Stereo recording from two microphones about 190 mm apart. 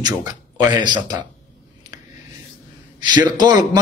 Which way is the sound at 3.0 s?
25° right (ahead or behind).